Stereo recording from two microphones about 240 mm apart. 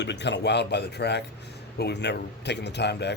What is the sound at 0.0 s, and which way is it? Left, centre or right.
A man's voice, left.